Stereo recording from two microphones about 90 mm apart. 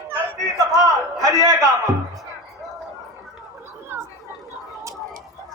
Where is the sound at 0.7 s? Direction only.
40° right (ahead or behind).